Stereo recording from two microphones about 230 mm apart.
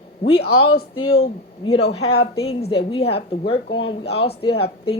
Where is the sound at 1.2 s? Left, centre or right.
Left.